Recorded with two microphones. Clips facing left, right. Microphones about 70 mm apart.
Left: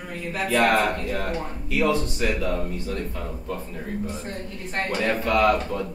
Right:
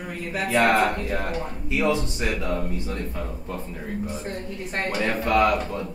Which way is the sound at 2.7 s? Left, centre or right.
Right.